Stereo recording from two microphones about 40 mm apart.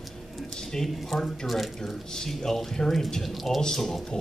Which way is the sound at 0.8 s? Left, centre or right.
Centre.